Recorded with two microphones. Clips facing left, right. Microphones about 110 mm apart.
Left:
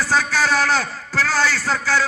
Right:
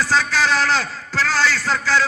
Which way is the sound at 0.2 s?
45° left (ahead or behind).